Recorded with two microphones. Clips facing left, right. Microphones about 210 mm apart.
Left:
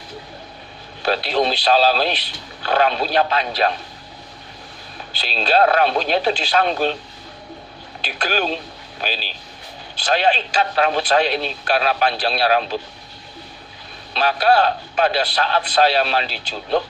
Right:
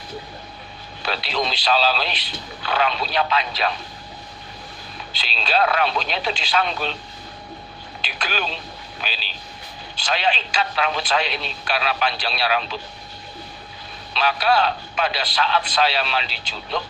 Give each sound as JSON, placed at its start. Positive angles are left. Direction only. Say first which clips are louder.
{"t": 1.0, "sound": "a man's voice", "louder": "left 6 dB", "side_deg": 45}
{"t": 5.2, "sound": "speech", "louder": "left 5 dB", "side_deg": 40}
{"t": 8.2, "sound": "a man's voice", "louder": "left 6 dB", "side_deg": 45}
{"t": 14.1, "sound": "a man's voice", "louder": "left 4 dB", "side_deg": 45}